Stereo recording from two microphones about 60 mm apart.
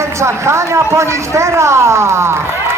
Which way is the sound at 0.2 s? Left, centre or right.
Right.